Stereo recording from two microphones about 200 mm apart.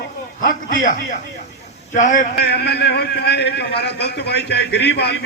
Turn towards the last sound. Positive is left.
turn(degrees=55)  # may be behind; listen again after turning